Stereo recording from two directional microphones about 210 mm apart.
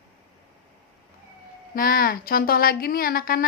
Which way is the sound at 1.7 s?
45° left (ahead or behind).